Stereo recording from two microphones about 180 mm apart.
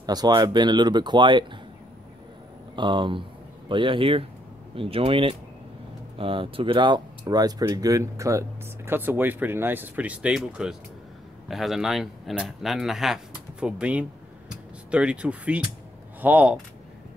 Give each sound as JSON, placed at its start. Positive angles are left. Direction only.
{"t": 0.0, "sound": "speech", "side_deg": -20}
{"t": 2.7, "sound": "speech", "side_deg": -25}